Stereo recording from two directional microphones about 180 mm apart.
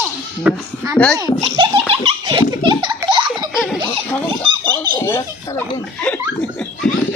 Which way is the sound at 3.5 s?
Centre (ahead or behind).